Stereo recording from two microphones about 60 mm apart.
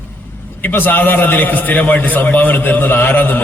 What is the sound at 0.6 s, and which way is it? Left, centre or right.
A man's voice, left.